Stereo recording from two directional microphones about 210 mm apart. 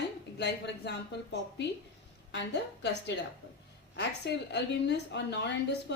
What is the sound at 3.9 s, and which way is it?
A woman's voice, 55° left (ahead or behind).